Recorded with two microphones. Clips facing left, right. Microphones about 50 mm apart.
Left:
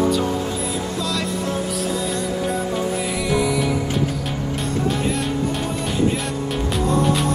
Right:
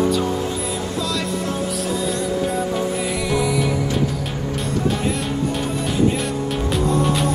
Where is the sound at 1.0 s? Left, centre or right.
Centre.